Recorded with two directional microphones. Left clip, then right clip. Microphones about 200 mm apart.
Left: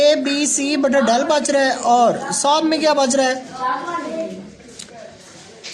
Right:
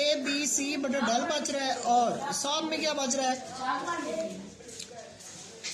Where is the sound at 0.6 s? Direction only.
50° left (ahead or behind).